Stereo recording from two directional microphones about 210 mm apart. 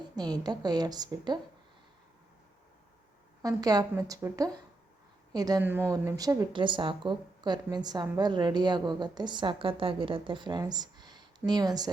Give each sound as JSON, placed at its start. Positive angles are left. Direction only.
{"t": 0.2, "sound": "a woman's voice", "side_deg": -20}
{"t": 3.4, "sound": "a woman's voice", "side_deg": -15}